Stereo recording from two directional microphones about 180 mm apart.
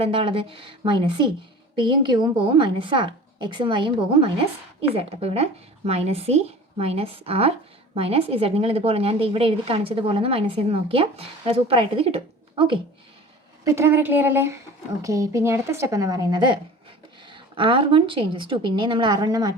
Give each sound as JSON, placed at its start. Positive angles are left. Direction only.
{"t": 0.0, "sound": "a woman's voice", "side_deg": -30}
{"t": 13.7, "sound": "a woman's voice", "side_deg": -15}